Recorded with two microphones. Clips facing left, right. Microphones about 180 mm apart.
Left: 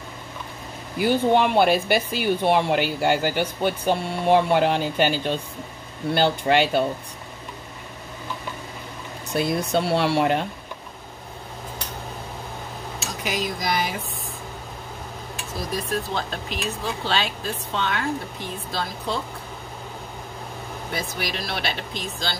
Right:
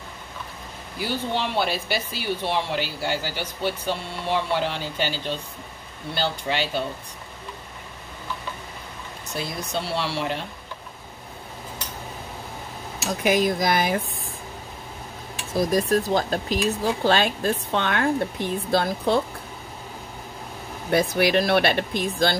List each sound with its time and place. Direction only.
0.9 s speech: 55° left (ahead or behind)
9.3 s speech: 55° left (ahead or behind)
13.2 s speech: 55° right (ahead or behind)
15.7 s speech: 40° right (ahead or behind); by 19.2 s 55° right (ahead or behind)
20.9 s speech: 60° right (ahead or behind)